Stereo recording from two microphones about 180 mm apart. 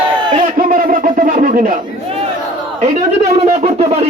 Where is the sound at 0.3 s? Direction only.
50° right (ahead or behind).